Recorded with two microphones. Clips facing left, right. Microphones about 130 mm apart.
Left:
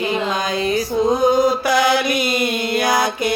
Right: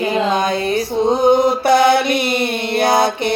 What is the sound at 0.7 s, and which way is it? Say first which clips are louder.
Mantra: left 1 dB; 25° right (ahead or behind).